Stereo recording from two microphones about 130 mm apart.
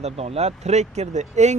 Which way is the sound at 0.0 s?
55° right (ahead or behind).